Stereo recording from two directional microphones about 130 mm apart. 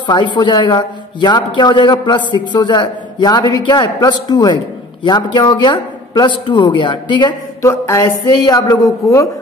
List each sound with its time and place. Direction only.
0.0 s speech: 35° left (ahead or behind)
7.6 s speech: 25° left (ahead or behind)